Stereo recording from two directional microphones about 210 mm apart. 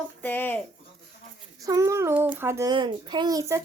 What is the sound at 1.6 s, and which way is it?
Speech, 15° right (ahead or behind).